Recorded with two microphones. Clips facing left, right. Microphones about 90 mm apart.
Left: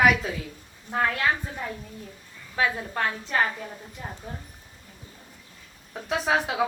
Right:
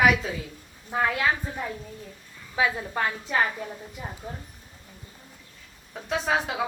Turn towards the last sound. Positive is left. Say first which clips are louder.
# left 1 dB
turn(degrees=5)  # may be behind; listen again after turning